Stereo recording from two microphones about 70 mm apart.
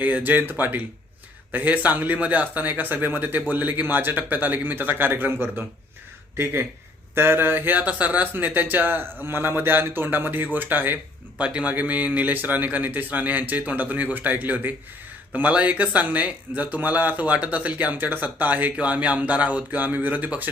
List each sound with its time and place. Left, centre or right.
0.0 s speech: right